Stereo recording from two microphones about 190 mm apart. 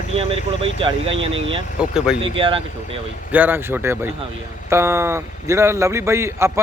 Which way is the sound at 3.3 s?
10° right (ahead or behind).